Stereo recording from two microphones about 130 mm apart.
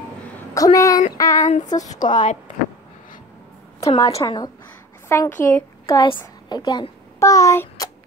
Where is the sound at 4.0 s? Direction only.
30° left (ahead or behind).